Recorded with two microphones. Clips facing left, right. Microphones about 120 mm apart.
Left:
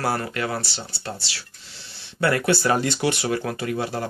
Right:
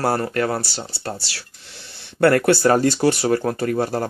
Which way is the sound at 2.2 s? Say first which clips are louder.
Right 6 dB; 50° right (ahead or behind).